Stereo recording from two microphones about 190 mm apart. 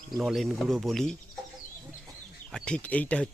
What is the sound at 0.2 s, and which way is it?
Speech, centre (ahead or behind).